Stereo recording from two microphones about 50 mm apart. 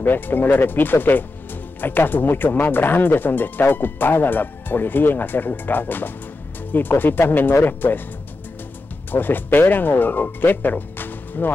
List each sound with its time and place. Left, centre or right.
0.0 s speech: left
9.1 s speech: left